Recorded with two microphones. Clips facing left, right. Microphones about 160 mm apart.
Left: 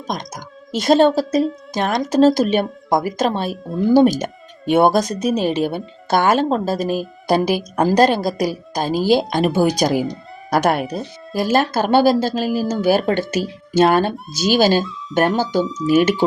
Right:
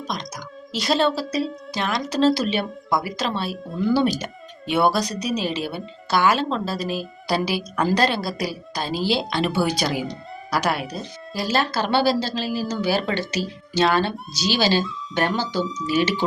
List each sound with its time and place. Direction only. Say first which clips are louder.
0.1 s speech: left 8 dB; 50° left (ahead or behind)